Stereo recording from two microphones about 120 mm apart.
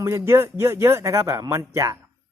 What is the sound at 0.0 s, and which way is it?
Speech, 25° right (ahead or behind).